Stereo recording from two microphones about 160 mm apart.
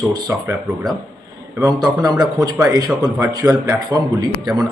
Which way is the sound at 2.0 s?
25° right (ahead or behind).